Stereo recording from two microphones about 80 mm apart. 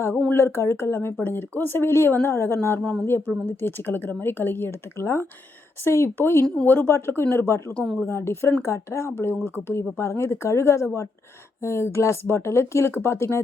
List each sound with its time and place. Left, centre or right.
0.3 s speech: left
3.3 s speech: centre
3.6 s speech: left
6.4 s speech: centre
6.7 s speech: left
7.7 s speech: centre
8.0 s speech: left